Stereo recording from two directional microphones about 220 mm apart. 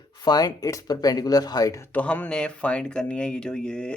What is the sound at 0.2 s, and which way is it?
Speech, 15° left (ahead or behind).